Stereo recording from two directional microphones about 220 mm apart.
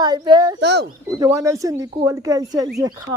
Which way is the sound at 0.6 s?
50° right (ahead or behind).